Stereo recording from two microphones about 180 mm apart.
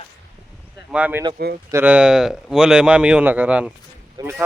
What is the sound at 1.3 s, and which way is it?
Speech, 60° right (ahead or behind).